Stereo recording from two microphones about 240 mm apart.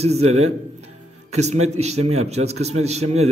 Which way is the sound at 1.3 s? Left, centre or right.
Right.